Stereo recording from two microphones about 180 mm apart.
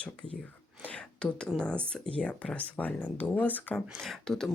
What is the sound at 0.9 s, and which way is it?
Speech, 5° left (ahead or behind).